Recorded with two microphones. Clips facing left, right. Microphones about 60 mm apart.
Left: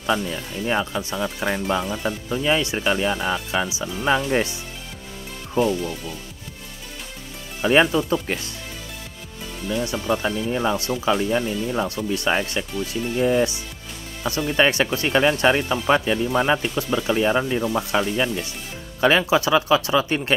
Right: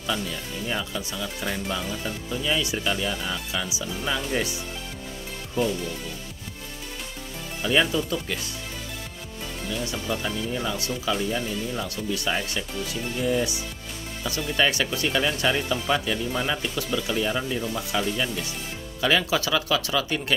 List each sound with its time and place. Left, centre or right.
0.0 s speech: left
5.5 s speech: left
7.6 s speech: left
9.8 s speech: left